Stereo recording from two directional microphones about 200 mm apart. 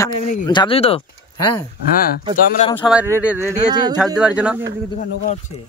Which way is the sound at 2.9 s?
5° right (ahead or behind).